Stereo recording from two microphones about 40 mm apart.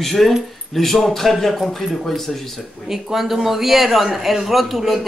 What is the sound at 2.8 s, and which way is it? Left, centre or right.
Speech, centre.